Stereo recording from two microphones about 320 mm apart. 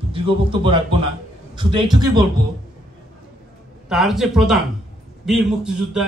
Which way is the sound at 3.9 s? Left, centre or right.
Centre.